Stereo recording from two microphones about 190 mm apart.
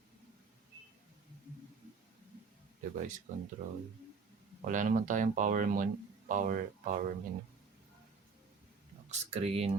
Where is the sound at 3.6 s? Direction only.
45° right (ahead or behind).